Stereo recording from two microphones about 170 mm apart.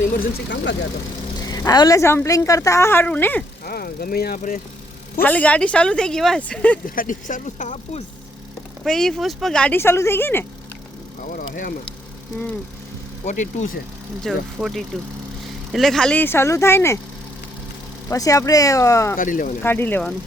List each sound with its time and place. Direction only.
0.2 s speech: 90° left
1.5 s a woman's voice: 20° left (ahead or behind)
3.6 s speech: 65° left (ahead or behind)
5.2 s a woman's voice: 10° left (ahead or behind)
6.8 s speech: 55° left (ahead or behind)
8.8 s a woman's voice: 5° left (ahead or behind)
11.2 s speech: 55° left (ahead or behind)
14.3 s a woman's voice: centre (ahead or behind); by 17.0 s 15° left (ahead or behind)
18.1 s speech: 20° left (ahead or behind)
19.1 s speech: 55° left (ahead or behind)
19.6 s a woman's voice: 10° left (ahead or behind)